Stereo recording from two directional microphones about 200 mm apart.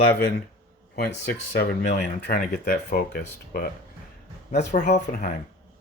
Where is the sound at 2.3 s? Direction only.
50° left (ahead or behind).